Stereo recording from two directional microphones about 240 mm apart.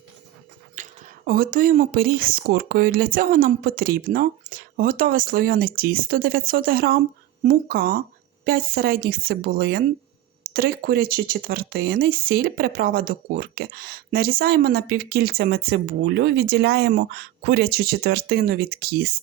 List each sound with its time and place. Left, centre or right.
0.8 s speech: right